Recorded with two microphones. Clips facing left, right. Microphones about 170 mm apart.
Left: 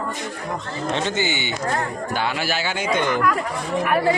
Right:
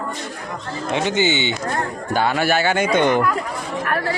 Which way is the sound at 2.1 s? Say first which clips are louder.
Right 7 dB; 50° right (ahead or behind).